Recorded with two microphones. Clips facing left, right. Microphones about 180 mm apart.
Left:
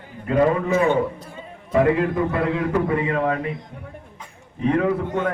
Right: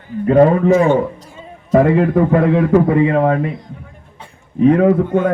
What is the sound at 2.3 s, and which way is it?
A man's voice, 50° right (ahead or behind).